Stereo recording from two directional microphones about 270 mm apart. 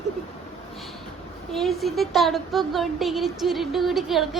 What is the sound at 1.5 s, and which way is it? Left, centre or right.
A woman's voice, centre.